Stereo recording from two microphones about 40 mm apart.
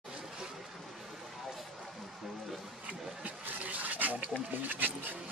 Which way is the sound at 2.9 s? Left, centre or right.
Right.